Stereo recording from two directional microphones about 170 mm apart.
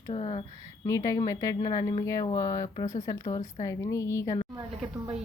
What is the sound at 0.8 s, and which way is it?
Speech, 20° left (ahead or behind).